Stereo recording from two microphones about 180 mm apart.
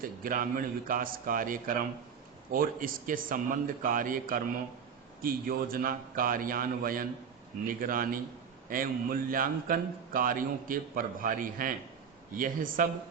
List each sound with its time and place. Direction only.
0.0 s a man's voice: 50° right (ahead or behind)